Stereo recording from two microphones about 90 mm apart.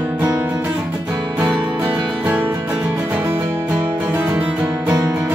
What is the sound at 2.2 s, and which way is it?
Music, 25° right (ahead or behind).